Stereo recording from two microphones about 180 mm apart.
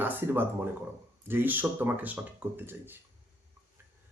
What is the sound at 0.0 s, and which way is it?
Speech, 10° right (ahead or behind).